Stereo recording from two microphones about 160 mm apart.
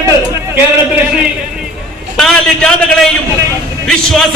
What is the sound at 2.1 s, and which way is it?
A man's voice, 5° left (ahead or behind).